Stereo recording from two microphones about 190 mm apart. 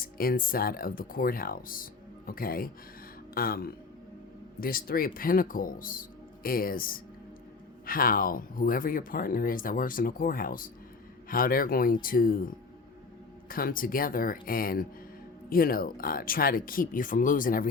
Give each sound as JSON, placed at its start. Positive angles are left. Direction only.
{"t": 0.0, "sound": "speech", "side_deg": 50}
{"t": 13.5, "sound": "speech", "side_deg": 50}